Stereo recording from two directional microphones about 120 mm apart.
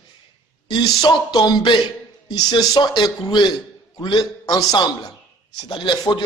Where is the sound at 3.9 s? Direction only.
35° left (ahead or behind).